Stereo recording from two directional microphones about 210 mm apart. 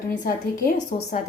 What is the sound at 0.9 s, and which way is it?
Speech, 40° left (ahead or behind).